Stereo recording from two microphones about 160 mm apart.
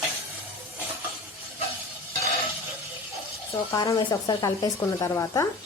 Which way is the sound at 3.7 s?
20° left (ahead or behind).